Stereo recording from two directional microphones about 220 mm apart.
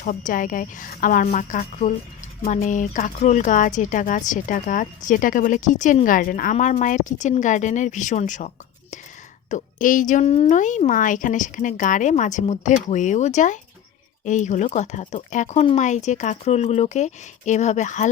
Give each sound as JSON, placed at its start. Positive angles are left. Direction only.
{"t": 0.0, "sound": "speech", "side_deg": 35}
{"t": 9.5, "sound": "speech", "side_deg": 35}